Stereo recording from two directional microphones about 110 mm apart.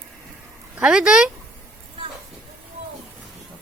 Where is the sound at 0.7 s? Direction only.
10° right (ahead or behind).